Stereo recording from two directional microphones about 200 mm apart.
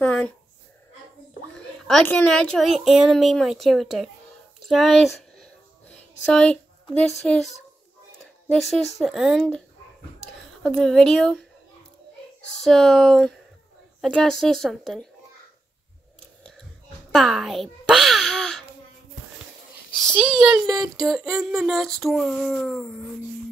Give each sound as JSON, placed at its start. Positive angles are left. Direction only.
{"t": 0.0, "sound": "a sound", "side_deg": 5}
{"t": 1.9, "sound": "speech", "side_deg": 5}
{"t": 4.6, "sound": "music", "side_deg": 0}
{"t": 6.2, "sound": "speech", "side_deg": 5}
{"t": 8.5, "sound": "speech", "side_deg": 0}
{"t": 10.6, "sound": "speech", "side_deg": 5}
{"t": 12.6, "sound": "speech", "side_deg": 0}
{"t": 17.1, "sound": "a sound", "side_deg": 0}
{"t": 20.1, "sound": "speech", "side_deg": 0}